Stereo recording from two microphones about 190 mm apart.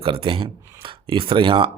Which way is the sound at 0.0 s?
30° right (ahead or behind).